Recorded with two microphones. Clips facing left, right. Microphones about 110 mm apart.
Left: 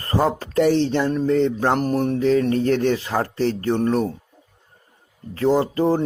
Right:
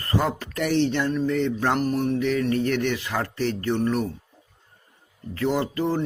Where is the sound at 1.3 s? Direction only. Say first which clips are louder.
Left 5 dB; 30° left (ahead or behind).